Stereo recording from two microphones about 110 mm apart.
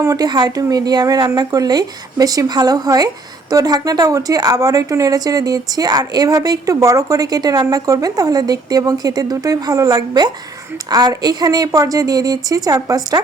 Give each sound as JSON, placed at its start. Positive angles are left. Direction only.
{"t": 0.0, "sound": "a woman's voice", "side_deg": -35}